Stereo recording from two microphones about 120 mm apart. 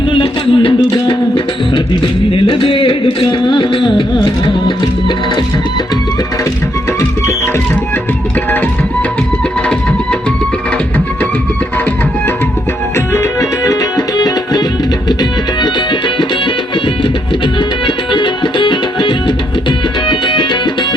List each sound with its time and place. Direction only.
0.1 s music: 45° left (ahead or behind)
1.7 s a sound: 45° left (ahead or behind)
13.1 s music: 25° left (ahead or behind)
17.8 s music: 40° left (ahead or behind)